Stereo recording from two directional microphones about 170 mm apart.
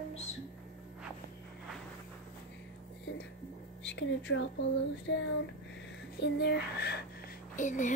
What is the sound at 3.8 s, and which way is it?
Speech, 90° left.